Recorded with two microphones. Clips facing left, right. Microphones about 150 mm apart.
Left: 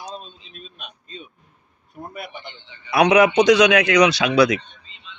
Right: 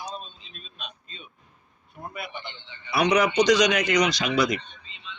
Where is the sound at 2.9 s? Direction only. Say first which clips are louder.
Left 6 dB; 60° left (ahead or behind).